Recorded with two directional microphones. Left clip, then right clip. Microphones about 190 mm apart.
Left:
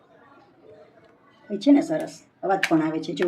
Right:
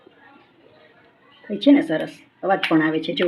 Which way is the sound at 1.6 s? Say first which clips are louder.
Right 3 dB; 35° right (ahead or behind).